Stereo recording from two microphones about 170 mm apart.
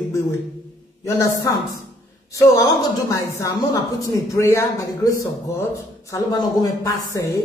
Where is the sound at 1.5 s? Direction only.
20° left (ahead or behind).